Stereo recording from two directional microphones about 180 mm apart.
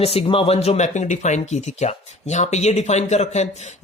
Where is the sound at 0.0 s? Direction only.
35° left (ahead or behind).